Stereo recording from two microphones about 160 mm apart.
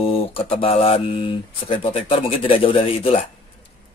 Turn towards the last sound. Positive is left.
turn(degrees=35)  # may be behind; listen again after turning